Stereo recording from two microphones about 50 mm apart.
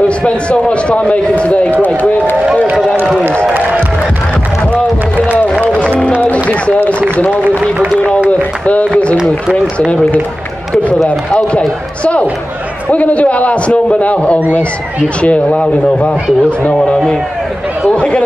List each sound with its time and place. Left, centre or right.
0.2 s speech: left
6.5 s speech: left
8.6 s speech: left
11.1 s speech: left
17.9 s speech: left